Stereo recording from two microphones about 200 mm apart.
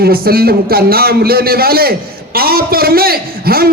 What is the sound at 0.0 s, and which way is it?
A man's voice, 50° right (ahead or behind).